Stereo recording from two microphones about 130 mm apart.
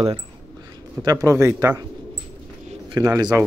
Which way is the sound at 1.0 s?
25° right (ahead or behind).